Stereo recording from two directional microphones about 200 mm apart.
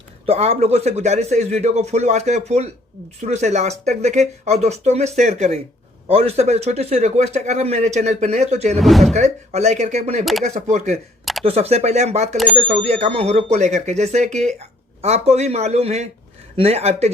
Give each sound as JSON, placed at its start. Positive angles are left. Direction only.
{"t": 0.3, "sound": "speech", "side_deg": -30}
{"t": 8.7, "sound": "speech", "side_deg": 0}
{"t": 9.1, "sound": "speech", "side_deg": -35}